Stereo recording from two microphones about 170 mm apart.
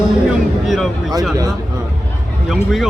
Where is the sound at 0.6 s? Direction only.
Centre (ahead or behind).